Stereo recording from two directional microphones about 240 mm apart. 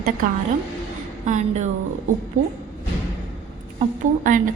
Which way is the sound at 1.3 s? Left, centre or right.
Right.